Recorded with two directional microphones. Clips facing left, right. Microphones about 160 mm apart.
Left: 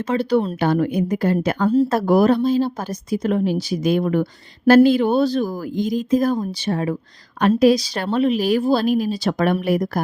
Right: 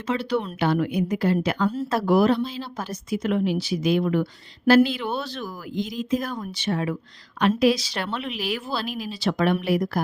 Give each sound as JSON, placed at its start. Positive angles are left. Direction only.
{"t": 0.1, "sound": "a woman's voice", "side_deg": 40}